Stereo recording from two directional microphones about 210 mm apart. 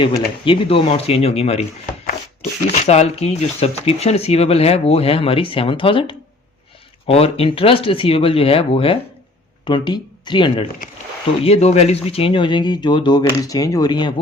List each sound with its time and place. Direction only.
0.4 s speech: 25° left (ahead or behind)